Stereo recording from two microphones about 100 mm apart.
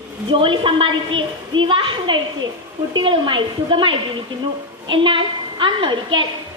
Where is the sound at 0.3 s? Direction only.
55° right (ahead or behind).